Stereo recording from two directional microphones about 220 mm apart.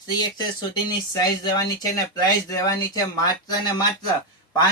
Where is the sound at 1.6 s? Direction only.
15° left (ahead or behind).